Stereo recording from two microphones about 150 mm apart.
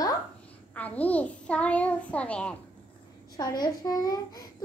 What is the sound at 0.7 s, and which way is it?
A child's voice, 10° left (ahead or behind).